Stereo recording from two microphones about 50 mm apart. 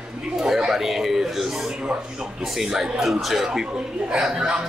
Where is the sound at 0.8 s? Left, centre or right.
Centre.